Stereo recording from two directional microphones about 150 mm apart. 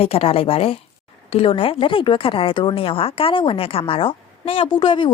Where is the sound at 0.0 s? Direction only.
40° left (ahead or behind).